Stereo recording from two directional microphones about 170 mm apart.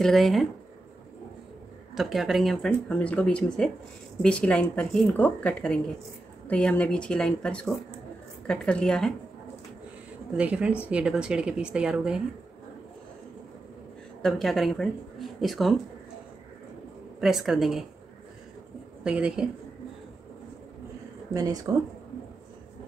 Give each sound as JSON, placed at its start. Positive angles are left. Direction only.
{"t": 0.0, "sound": "speech", "side_deg": 0}
{"t": 2.0, "sound": "speech", "side_deg": 0}
{"t": 10.3, "sound": "a woman's voice", "side_deg": -5}
{"t": 14.2, "sound": "speech", "side_deg": 0}
{"t": 17.2, "sound": "speech", "side_deg": 0}
{"t": 19.0, "sound": "speech", "side_deg": -5}
{"t": 21.3, "sound": "speech", "side_deg": -20}